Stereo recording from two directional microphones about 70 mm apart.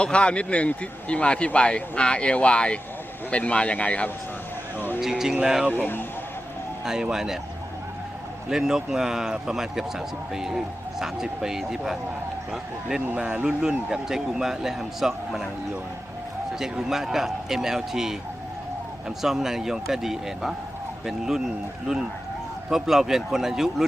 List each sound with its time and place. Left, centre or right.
0.0 s a man's voice: centre
4.9 s a man's voice: centre
6.8 s a man's voice: centre
8.4 s a man's voice: centre
13.1 s a man's voice: centre
16.6 s a man's voice: centre